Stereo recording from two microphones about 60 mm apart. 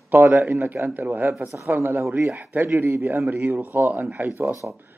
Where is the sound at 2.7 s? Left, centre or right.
Right.